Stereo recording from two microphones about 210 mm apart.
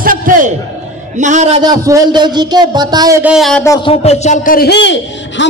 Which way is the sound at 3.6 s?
15° left (ahead or behind).